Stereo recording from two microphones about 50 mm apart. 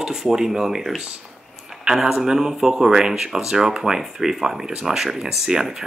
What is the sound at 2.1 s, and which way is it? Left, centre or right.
Speech, centre.